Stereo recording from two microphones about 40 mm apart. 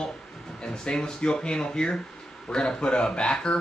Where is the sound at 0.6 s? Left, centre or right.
Left.